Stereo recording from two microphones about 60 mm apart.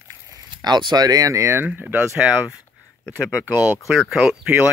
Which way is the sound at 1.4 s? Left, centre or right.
Right.